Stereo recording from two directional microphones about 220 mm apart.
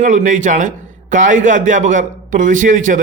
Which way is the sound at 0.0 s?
35° right (ahead or behind).